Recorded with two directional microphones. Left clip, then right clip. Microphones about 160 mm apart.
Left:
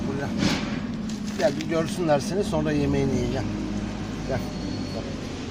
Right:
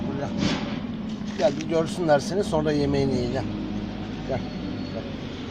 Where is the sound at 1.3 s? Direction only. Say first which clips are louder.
Right 1 dB; centre (ahead or behind).